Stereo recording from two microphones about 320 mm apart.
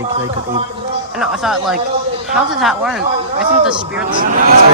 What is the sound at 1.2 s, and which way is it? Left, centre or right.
Speech, centre.